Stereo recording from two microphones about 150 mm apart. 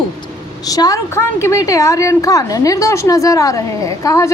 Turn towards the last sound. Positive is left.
turn(degrees=20)  # may be behind; listen again after turning